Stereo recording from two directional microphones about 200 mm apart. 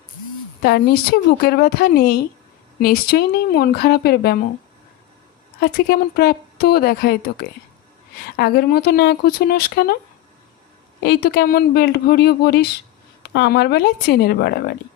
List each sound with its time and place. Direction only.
0.6 s speech: 50° left (ahead or behind)
5.5 s speech: 50° left (ahead or behind)
11.0 s speech: 50° left (ahead or behind)